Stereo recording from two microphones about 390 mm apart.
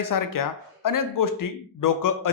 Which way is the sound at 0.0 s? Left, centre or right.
Left.